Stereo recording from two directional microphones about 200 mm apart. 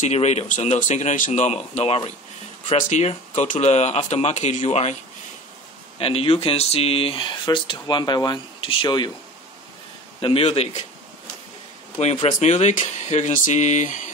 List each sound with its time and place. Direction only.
0.0 s speech: 35° left (ahead or behind)
5.9 s speech: 30° left (ahead or behind)
10.2 s speech: 30° left (ahead or behind)
12.0 s speech: 35° left (ahead or behind)